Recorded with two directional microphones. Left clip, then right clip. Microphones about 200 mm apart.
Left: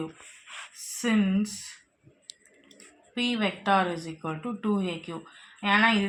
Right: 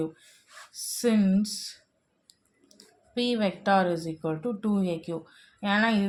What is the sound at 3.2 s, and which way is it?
Speech, 50° right (ahead or behind).